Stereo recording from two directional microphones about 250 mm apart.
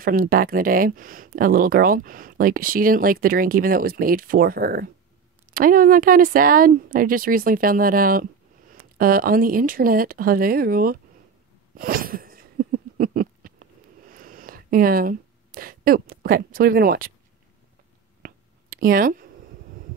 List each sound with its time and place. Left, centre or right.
0.0 s speech: right
11.7 s wheeze: right
18.2 s a sound: right